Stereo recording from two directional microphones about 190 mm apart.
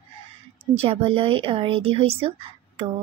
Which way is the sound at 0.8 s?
30° right (ahead or behind).